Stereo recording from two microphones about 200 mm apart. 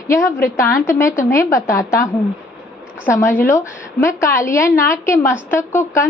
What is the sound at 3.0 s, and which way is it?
A woman's voice, 10° left (ahead or behind).